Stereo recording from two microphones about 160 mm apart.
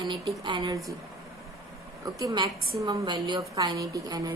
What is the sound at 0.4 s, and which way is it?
Speech, 25° right (ahead or behind).